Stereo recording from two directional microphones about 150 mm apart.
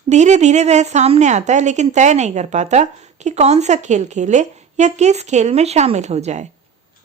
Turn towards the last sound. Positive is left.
turn(degrees=-45)  # may be behind; listen again after turning